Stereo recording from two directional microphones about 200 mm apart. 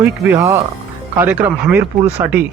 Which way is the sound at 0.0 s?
15° right (ahead or behind).